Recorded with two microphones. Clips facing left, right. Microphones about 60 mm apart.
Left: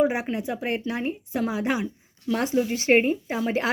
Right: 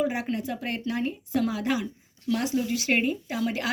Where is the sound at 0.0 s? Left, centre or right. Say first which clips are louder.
Left 4 dB; left.